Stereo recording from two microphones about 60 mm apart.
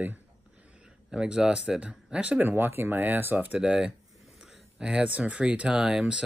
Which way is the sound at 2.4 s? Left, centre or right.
Right.